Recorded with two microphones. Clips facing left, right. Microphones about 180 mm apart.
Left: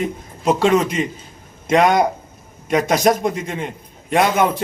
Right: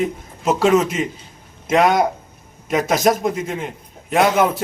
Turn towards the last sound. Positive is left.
turn(degrees=-5)  # may be behind; listen again after turning